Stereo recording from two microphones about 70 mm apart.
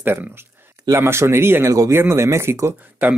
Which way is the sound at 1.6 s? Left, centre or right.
Right.